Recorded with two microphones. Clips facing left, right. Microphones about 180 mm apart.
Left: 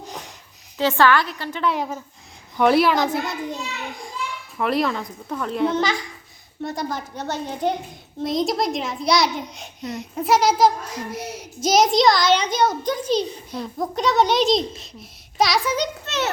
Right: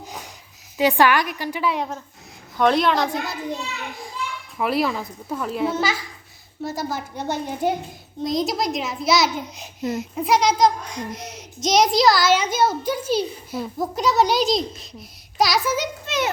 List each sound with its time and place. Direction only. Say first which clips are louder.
0.0 s a sound: left 1 dB; centre (ahead or behind)
0.8 s a woman's voice: even; 15° right (ahead or behind)
1.7 s a child's voice: left 1 dB; 5° left (ahead or behind)
4.5 s a child's voice: even; 5° right (ahead or behind)
8.2 s a child's voice: left 1 dB; centre (ahead or behind)